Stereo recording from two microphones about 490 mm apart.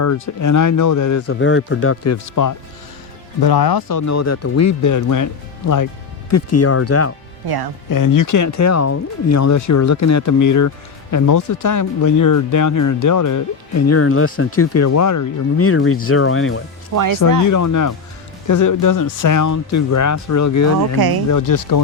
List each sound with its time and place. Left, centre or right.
0.0 s speech: left
3.4 s speech: left
7.4 s speech: right
7.9 s speech: left
16.9 s speech: right
17.4 s speech: left